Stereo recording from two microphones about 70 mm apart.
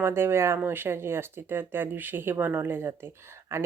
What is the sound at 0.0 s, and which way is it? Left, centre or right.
Speech, right.